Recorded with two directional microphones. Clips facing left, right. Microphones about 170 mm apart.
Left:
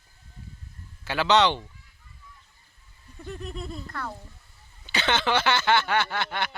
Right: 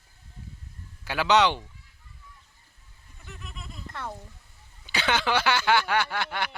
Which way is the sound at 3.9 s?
20° right (ahead or behind).